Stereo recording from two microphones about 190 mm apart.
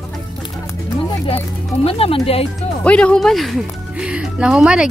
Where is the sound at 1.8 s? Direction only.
30° left (ahead or behind).